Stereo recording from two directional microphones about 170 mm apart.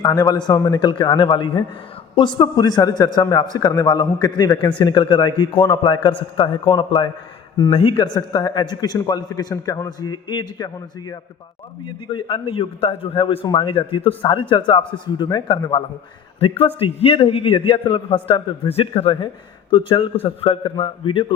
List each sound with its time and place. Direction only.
0.0 s a man's voice: 20° left (ahead or behind)